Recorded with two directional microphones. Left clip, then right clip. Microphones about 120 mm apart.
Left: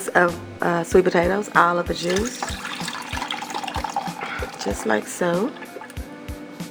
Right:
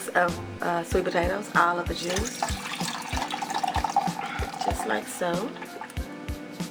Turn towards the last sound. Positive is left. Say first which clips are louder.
# left 6 dB
turn(degrees=30)  # may be behind; listen again after turning